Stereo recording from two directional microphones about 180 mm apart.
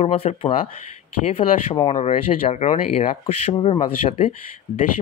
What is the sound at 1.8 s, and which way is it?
Speech, 40° left (ahead or behind).